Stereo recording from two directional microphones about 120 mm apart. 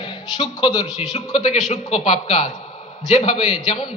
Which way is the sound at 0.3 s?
35° left (ahead or behind).